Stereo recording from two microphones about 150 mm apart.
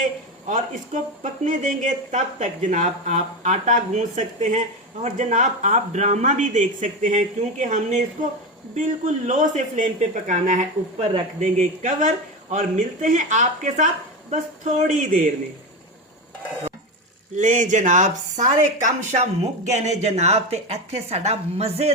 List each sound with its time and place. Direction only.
0.0 s a sound: 60° right (ahead or behind)
1.2 s a man's voice: 55° right (ahead or behind)
17.3 s speech: 55° right (ahead or behind)